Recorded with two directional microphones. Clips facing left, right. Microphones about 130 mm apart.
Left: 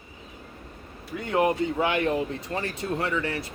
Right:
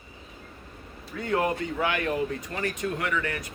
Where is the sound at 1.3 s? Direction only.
20° left (ahead or behind).